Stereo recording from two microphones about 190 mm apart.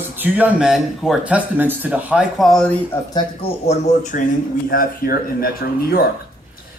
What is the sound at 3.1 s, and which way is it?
Speech, 30° left (ahead or behind).